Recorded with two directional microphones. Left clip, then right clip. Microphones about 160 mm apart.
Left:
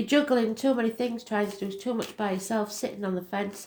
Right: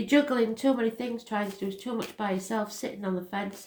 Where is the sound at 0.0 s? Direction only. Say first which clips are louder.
Left 1 dB; 30° left (ahead or behind).